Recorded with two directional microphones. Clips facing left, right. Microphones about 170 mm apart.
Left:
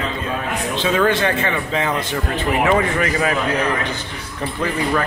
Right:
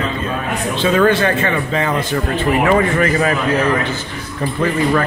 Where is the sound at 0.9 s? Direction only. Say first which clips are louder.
Right 4 dB; 15° left (ahead or behind).